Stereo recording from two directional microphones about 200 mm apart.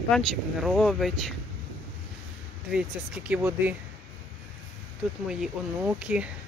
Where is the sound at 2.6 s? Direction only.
5° right (ahead or behind).